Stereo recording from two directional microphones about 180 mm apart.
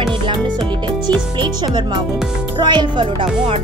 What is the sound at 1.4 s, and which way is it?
Music, 25° right (ahead or behind).